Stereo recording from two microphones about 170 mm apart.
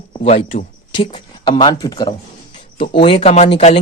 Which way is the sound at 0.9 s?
30° left (ahead or behind).